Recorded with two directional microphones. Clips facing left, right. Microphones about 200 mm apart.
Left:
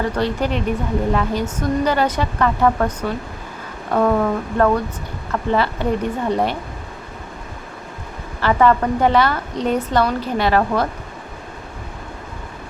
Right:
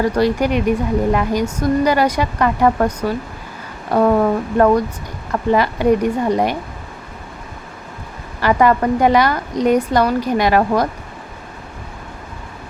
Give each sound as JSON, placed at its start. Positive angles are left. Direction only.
{"t": 0.0, "sound": "a woman's voice", "side_deg": -10}
{"t": 8.4, "sound": "a woman's voice", "side_deg": -10}